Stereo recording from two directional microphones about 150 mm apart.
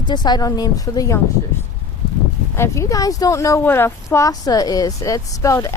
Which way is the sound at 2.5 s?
20° left (ahead or behind).